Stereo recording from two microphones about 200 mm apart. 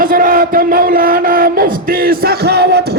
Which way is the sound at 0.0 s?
45° right (ahead or behind).